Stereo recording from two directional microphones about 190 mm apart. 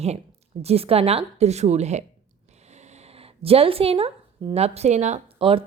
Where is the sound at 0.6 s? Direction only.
30° right (ahead or behind).